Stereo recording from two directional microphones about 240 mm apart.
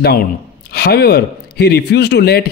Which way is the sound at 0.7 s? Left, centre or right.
Left.